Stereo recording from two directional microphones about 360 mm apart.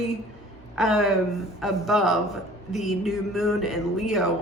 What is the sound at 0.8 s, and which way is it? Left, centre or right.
Speech, centre.